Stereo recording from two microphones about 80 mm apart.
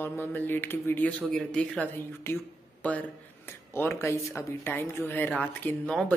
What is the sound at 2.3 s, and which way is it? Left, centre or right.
Speech, left.